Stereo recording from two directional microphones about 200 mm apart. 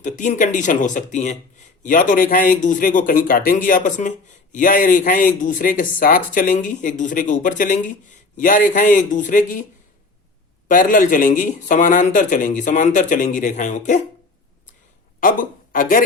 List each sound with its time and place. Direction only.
0.0 s speech: 40° left (ahead or behind)
10.7 s speech: 40° left (ahead or behind)
15.2 s speech: 45° left (ahead or behind)